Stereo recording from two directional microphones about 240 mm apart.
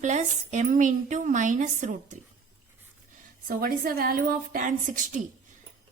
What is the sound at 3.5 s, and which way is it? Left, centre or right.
A woman's voice, right.